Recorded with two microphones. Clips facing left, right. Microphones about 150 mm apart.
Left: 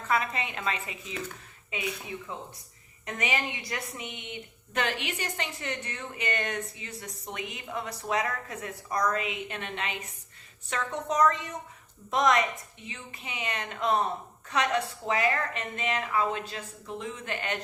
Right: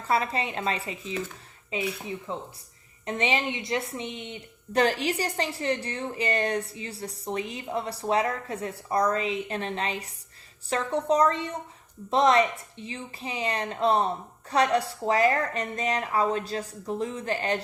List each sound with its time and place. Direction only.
0.1 s a woman's voice: 30° right (ahead or behind)